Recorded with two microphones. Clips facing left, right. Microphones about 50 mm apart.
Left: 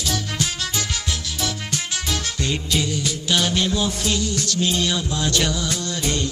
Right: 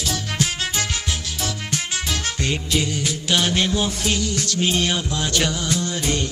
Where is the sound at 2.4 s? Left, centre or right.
Right.